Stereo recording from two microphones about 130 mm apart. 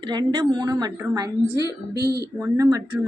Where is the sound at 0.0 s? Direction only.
35° right (ahead or behind).